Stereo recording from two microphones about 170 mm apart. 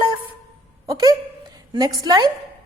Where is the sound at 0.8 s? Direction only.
20° right (ahead or behind).